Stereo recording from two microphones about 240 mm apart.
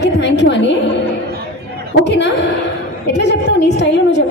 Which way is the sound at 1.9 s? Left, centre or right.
Left.